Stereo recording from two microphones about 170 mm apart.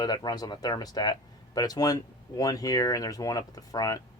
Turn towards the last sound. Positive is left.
turn(degrees=20)  # may be behind; listen again after turning